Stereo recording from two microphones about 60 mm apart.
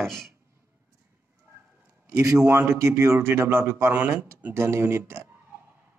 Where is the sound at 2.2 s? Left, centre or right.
Right.